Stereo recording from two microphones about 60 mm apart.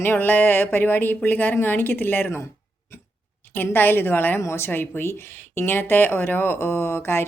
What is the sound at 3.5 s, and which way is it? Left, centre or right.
Speech, left.